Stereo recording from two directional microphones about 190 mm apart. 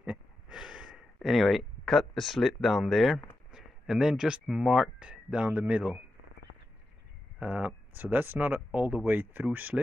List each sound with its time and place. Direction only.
0.0 s speech: 5° right (ahead or behind)
7.3 s speech: 5° right (ahead or behind)